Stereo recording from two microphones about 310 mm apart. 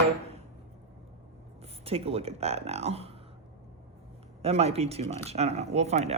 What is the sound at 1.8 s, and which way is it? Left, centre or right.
Speech, centre.